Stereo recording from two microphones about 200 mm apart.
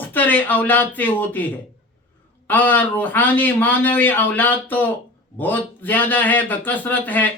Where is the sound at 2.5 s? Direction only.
10° left (ahead or behind).